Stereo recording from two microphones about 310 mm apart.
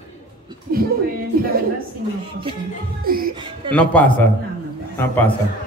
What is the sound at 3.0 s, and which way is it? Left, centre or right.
Music, right.